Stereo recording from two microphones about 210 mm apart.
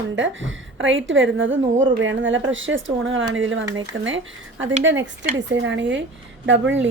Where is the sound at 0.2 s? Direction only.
65° right (ahead or behind).